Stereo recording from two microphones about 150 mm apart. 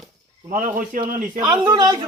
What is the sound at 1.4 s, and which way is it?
Speech, 20° right (ahead or behind).